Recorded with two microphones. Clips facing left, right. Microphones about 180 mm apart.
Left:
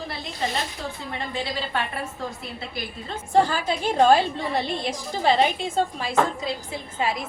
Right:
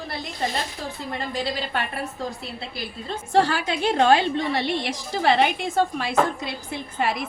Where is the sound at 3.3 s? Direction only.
85° right; by 7.1 s 65° right (ahead or behind).